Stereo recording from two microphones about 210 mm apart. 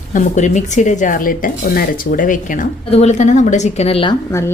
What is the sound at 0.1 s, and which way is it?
A woman's voice, 35° left (ahead or behind).